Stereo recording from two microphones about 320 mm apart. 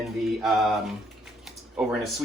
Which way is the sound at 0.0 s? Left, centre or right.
Centre.